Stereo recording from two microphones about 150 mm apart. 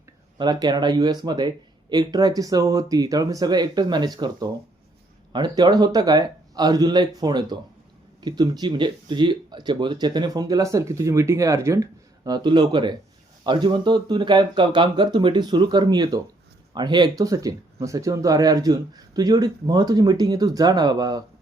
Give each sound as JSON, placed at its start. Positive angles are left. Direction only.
{"t": 0.3, "sound": "speech", "side_deg": -30}